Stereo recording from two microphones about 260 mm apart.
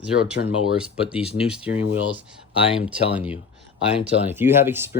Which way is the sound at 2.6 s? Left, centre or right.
Left.